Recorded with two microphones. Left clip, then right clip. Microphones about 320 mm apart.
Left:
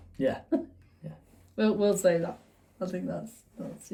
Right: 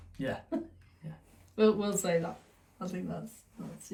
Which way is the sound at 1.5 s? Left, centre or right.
Centre.